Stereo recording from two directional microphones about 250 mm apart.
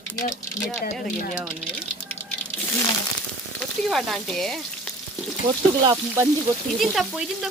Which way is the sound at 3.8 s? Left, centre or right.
Centre.